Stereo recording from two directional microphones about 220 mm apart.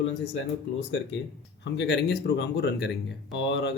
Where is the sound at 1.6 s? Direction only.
50° left (ahead or behind).